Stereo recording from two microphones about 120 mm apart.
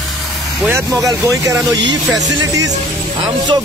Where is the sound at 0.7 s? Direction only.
25° right (ahead or behind).